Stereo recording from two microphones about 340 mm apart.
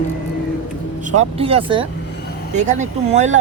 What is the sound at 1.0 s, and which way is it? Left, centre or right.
Speech, centre.